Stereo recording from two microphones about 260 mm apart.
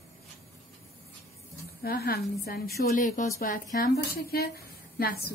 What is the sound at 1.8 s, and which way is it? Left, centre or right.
Speech, left.